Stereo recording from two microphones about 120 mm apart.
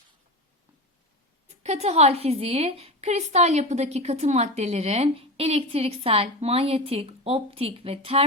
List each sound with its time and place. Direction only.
1.5 s a woman's voice: 65° right (ahead or behind)